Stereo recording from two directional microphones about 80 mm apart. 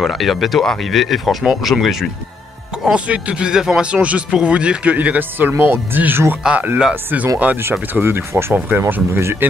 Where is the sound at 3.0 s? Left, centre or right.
Centre.